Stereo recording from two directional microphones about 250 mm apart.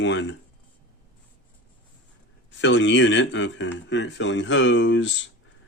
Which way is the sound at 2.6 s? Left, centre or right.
Left.